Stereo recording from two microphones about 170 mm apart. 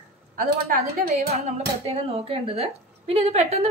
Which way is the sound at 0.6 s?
65° right (ahead or behind).